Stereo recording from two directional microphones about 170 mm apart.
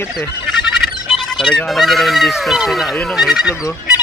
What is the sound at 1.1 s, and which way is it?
Speech, centre (ahead or behind).